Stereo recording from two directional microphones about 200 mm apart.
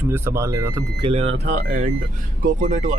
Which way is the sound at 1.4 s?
45° right (ahead or behind).